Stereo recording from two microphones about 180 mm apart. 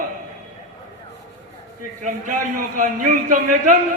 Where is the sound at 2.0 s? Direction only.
45° right (ahead or behind).